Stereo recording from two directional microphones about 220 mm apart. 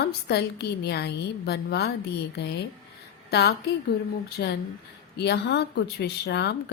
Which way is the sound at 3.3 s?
50° left (ahead or behind).